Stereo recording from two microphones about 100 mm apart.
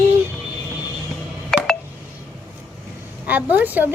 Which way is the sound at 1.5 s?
5° left (ahead or behind).